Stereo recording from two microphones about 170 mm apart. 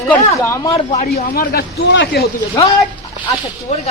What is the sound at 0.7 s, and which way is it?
Speech, 40° left (ahead or behind).